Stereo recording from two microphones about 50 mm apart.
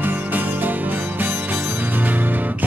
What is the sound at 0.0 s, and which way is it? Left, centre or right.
Music, right.